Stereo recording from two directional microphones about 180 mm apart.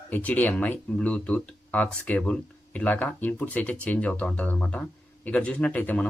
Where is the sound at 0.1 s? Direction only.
10° left (ahead or behind).